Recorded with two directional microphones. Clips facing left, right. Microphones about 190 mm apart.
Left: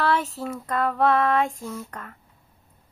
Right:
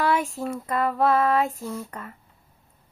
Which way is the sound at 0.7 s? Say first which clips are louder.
Even; 5° right (ahead or behind).